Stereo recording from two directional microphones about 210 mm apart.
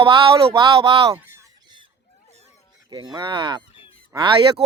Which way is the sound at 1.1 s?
15° right (ahead or behind).